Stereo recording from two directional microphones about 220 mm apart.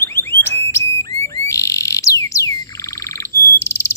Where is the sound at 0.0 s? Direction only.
10° left (ahead or behind).